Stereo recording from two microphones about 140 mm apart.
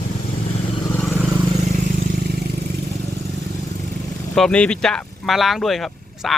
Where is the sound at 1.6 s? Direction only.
55° right (ahead or behind).